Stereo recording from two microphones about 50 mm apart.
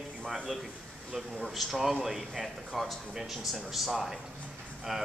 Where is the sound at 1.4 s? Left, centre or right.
Centre.